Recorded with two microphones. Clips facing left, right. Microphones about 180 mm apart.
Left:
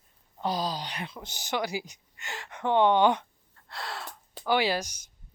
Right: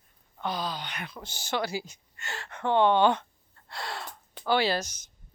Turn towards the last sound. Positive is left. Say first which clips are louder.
# even
turn(degrees=10)  # may be behind; listen again after turning